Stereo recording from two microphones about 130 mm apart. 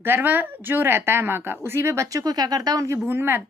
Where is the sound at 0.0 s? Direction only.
15° right (ahead or behind).